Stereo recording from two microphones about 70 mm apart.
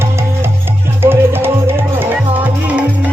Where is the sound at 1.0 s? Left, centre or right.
Right.